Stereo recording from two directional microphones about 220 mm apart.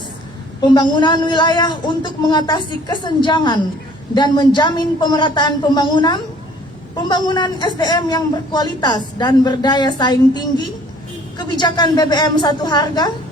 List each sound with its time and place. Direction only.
0.7 s a woman's voice: 20° left (ahead or behind)